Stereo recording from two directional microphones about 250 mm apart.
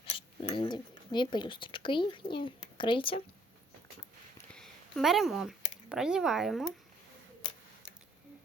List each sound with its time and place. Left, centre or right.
0.0 s speech: centre
4.4 s a sound: centre
5.9 s speech: centre